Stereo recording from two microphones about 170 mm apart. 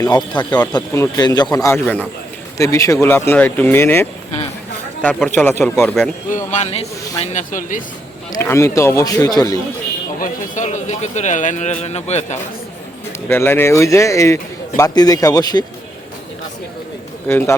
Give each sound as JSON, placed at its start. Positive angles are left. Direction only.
{"t": 0.0, "sound": "speech", "side_deg": 25}
{"t": 6.3, "sound": "speech", "side_deg": 45}
{"t": 7.3, "sound": "a man's voice", "side_deg": 50}
{"t": 8.3, "sound": "speech", "side_deg": 15}
{"t": 10.2, "sound": "a man's voice", "side_deg": 50}
{"t": 13.2, "sound": "speech", "side_deg": 15}
{"t": 17.2, "sound": "speech", "side_deg": 15}